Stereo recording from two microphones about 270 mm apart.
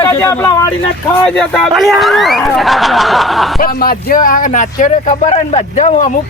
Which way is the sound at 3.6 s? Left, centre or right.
Left.